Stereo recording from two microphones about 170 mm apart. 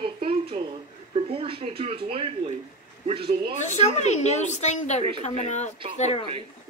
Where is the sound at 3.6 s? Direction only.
40° left (ahead or behind).